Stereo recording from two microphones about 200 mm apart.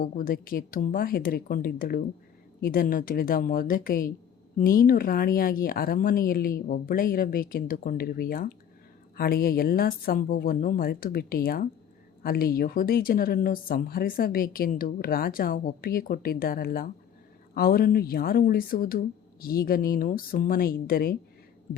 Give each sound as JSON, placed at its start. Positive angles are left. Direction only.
{"t": 0.0, "sound": "speech", "side_deg": 45}